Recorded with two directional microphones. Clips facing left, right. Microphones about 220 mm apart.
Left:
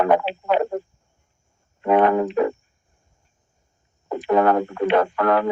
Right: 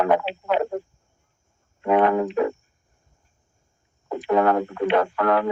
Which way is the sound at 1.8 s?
40° left (ahead or behind).